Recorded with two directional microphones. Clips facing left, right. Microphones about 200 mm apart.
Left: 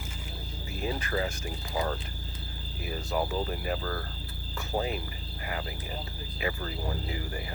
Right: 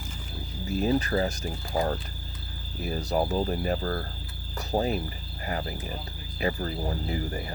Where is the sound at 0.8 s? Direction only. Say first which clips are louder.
Right 6 dB; 35° right (ahead or behind).